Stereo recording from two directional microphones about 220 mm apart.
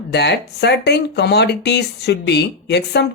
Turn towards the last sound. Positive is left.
turn(degrees=50)  # may be behind; listen again after turning